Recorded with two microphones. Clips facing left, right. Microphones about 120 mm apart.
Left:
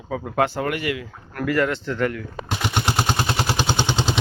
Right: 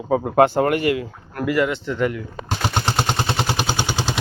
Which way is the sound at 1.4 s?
10° right (ahead or behind).